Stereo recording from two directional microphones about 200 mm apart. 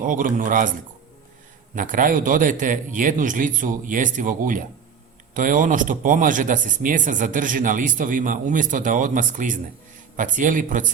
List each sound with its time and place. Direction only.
0.0 s speech: 40° right (ahead or behind)
1.7 s speech: 40° right (ahead or behind)